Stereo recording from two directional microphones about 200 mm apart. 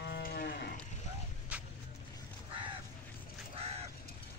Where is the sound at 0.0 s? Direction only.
55° left (ahead or behind).